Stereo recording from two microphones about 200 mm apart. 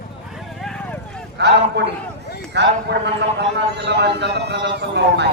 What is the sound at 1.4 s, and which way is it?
A man's voice, 55° right (ahead or behind).